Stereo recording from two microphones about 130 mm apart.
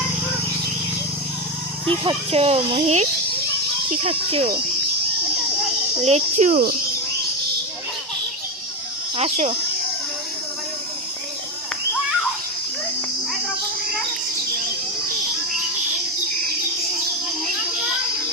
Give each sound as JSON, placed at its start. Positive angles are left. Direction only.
{"t": 1.9, "sound": "speech", "side_deg": -45}
{"t": 6.0, "sound": "speech", "side_deg": -60}
{"t": 9.1, "sound": "speech", "side_deg": -55}